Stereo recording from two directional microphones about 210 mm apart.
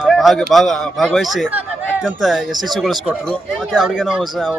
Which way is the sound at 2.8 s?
Centre (ahead or behind).